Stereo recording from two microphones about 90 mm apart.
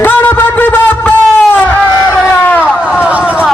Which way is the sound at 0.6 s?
20° left (ahead or behind).